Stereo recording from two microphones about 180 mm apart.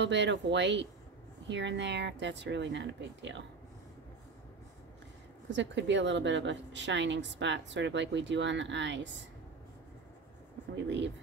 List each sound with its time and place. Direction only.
0.0 s a woman's voice: 80° right
5.5 s a woman's voice: 85° right